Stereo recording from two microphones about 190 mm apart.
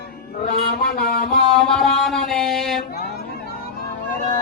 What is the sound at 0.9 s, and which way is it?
Music, 55° left (ahead or behind).